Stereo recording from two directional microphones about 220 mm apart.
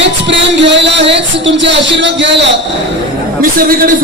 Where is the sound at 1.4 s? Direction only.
55° right (ahead or behind).